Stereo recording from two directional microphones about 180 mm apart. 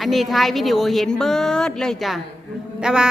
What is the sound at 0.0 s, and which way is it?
A woman's voice, centre (ahead or behind).